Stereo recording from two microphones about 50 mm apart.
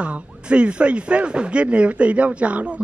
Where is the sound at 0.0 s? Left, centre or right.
Right.